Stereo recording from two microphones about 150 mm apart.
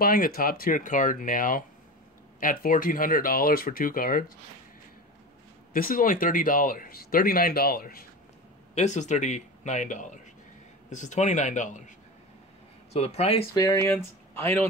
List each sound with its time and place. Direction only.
0.0 s speech: 70° left (ahead or behind)
5.7 s speech: 70° left (ahead or behind)
8.7 s a man's voice: 50° left (ahead or behind)
12.9 s a man's voice: 45° left (ahead or behind)
13.6 s speech: 20° left (ahead or behind)